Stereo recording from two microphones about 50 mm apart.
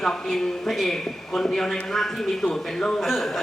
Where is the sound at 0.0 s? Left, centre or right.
Centre.